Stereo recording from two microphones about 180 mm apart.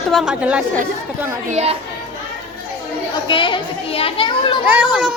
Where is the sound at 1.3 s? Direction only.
35° right (ahead or behind).